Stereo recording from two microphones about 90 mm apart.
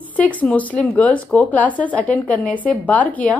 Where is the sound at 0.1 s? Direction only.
15° left (ahead or behind).